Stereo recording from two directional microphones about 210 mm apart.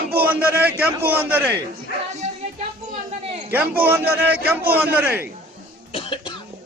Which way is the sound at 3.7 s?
45° right (ahead or behind).